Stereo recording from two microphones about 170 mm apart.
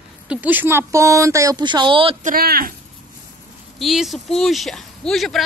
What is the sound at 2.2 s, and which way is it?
Speech, 60° right (ahead or behind).